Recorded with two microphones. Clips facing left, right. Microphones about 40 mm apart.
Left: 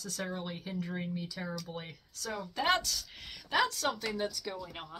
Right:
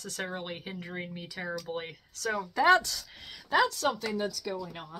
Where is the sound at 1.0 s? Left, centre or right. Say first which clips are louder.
Even; right.